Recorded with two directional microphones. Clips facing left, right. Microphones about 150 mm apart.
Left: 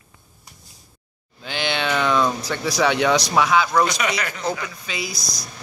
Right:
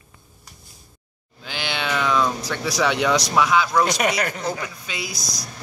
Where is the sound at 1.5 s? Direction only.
5° right (ahead or behind).